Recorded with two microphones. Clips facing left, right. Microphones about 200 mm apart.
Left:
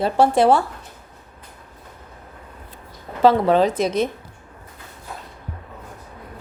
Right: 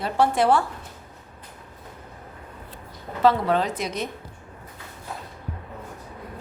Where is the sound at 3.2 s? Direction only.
30° left (ahead or behind).